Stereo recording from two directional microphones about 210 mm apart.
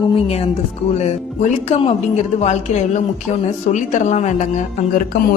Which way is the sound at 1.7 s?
30° left (ahead or behind).